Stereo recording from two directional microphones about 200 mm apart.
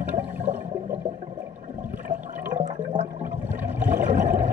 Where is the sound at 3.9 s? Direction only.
10° right (ahead or behind).